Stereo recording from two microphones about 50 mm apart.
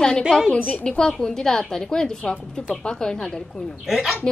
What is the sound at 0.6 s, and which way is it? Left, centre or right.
Speech, left.